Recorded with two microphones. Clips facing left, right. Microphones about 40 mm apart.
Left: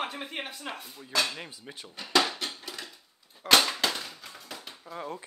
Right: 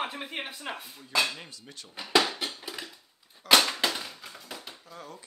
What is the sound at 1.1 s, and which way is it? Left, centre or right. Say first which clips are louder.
Speech: right 1 dB; centre.